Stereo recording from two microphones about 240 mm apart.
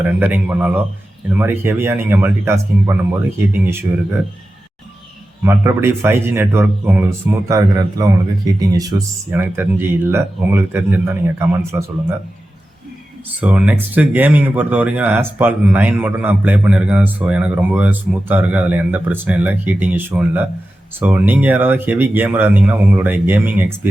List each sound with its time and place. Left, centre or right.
0.0 s speech: centre
5.5 s speech: centre
13.4 s speech: centre